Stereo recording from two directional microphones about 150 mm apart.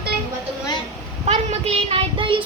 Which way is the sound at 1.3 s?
45° right (ahead or behind).